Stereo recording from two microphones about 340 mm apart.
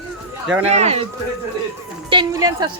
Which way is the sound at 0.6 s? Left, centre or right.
Centre.